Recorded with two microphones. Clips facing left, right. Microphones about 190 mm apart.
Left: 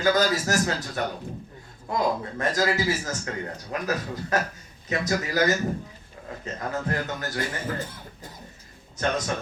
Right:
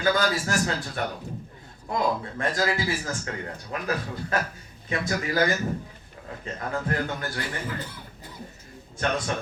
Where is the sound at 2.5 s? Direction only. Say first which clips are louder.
Left 2 dB; 40° left (ahead or behind).